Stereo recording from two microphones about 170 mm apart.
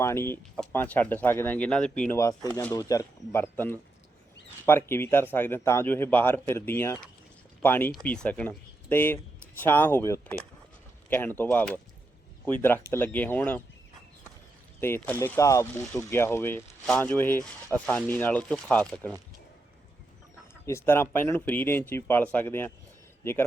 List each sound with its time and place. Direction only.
0.0 s speech: 15° left (ahead or behind)
2.1 s speech: 20° left (ahead or behind)
2.5 s speech: 10° left (ahead or behind)
2.7 s speech: 20° left (ahead or behind)
12.9 s speech: 10° left (ahead or behind)
14.8 s speech: 15° left (ahead or behind)
20.7 s speech: 15° left (ahead or behind)